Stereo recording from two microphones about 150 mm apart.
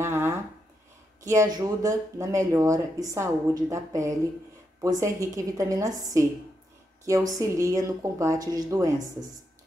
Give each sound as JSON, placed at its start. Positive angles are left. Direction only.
{"t": 0.0, "sound": "a sound", "side_deg": -15}
{"t": 1.2, "sound": "speech", "side_deg": -20}
{"t": 7.2, "sound": "speech", "side_deg": -20}